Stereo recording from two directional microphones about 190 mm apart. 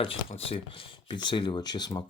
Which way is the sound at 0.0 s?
30° left (ahead or behind).